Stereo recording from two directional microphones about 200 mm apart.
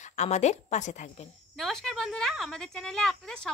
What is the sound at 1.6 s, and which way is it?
Speech, centre (ahead or behind).